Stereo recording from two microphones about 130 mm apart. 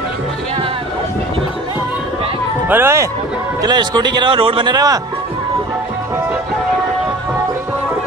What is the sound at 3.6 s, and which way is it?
A man's voice, 35° right (ahead or behind).